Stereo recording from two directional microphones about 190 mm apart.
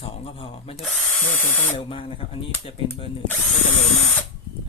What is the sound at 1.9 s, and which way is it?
Speech, 30° left (ahead or behind).